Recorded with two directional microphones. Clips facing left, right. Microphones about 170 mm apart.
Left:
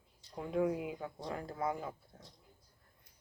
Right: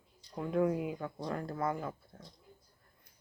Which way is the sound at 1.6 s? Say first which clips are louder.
Right 1 dB; 15° left (ahead or behind).